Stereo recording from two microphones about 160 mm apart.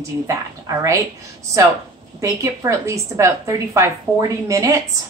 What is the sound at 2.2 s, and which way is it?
A woman's voice, 20° right (ahead or behind).